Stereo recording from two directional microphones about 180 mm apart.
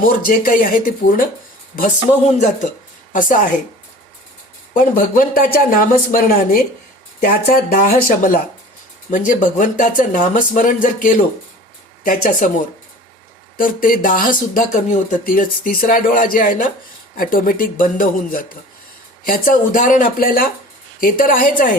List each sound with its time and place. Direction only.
0.3 s speech: 50° left (ahead or behind)
3.1 s speech: 45° left (ahead or behind)
4.7 s speech: 50° left (ahead or behind)
13.6 s speech: 50° left (ahead or behind)